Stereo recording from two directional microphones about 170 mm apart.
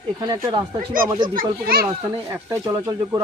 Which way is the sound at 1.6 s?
60° right (ahead or behind).